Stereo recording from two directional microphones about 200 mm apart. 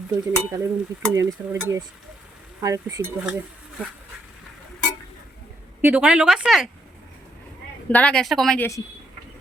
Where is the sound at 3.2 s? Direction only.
5° right (ahead or behind).